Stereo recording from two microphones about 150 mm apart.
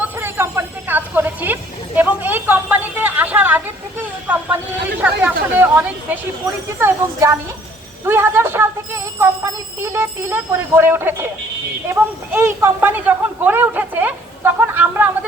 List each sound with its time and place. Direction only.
0.0 s a sound: 15° right (ahead or behind)
4.3 s speech: 10° right (ahead or behind)
9.8 s speech: 15° right (ahead or behind)